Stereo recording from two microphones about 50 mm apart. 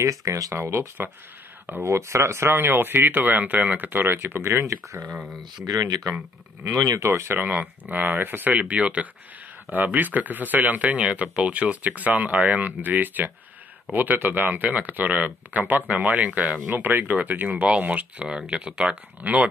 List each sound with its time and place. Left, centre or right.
0.0 s speech: right
0.6 s speech: right
1.9 s speech: right
4.6 s speech: right
5.0 s speech: right
7.0 s speech: right
7.3 s speech: right
8.5 s speech: right
16.6 s speech: right
18.2 s speech: centre
19.2 s speech: right